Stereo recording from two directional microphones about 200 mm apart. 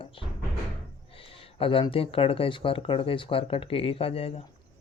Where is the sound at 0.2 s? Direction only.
25° left (ahead or behind).